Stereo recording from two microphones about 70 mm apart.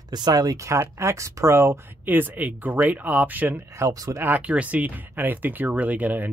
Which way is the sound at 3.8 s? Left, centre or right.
Right.